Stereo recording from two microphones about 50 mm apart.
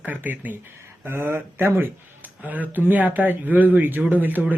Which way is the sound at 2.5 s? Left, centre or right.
Right.